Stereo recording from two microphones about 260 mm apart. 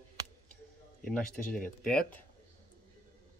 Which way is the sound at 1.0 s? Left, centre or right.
Left.